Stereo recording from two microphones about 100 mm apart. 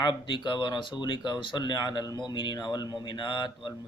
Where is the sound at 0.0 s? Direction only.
50° left (ahead or behind).